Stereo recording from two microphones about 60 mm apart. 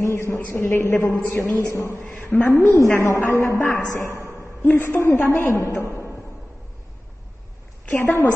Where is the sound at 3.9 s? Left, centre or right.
Left.